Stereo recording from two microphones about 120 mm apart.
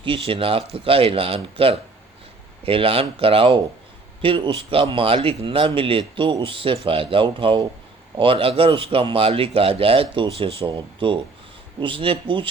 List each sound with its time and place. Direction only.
0.0 s speech: 50° right (ahead or behind)